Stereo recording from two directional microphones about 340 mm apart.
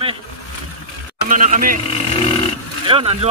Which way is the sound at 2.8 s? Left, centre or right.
Centre.